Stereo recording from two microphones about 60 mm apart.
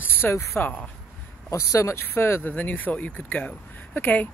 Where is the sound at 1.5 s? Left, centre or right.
Left.